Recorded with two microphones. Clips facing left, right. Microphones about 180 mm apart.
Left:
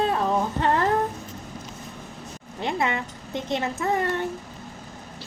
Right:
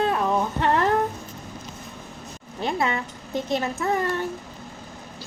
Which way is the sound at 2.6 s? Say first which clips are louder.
Right 1 dB; 25° left (ahead or behind).